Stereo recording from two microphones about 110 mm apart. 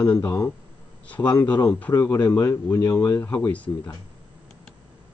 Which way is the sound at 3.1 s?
15° left (ahead or behind).